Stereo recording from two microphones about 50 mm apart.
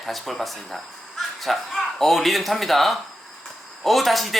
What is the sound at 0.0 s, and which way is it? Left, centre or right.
Speech, centre.